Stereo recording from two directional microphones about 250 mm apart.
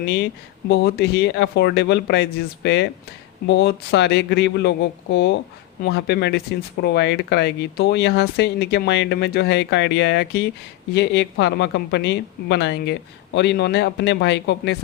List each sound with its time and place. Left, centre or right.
0.0 s speech: left